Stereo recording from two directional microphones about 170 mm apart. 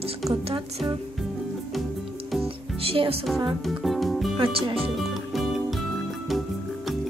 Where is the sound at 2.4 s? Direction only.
35° right (ahead or behind).